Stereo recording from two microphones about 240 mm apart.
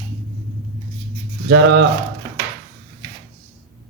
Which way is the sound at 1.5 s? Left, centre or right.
Right.